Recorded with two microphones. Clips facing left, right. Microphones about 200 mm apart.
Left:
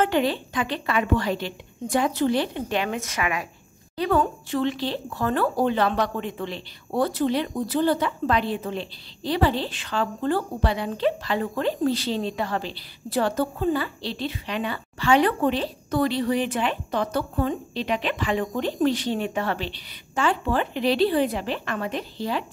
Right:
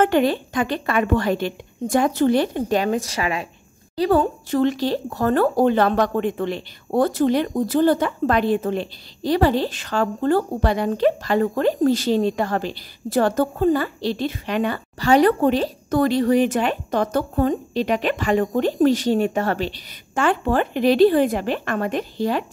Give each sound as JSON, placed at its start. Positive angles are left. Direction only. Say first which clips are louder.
{"t": 0.0, "sound": "speech", "louder": "right 5 dB", "side_deg": -50}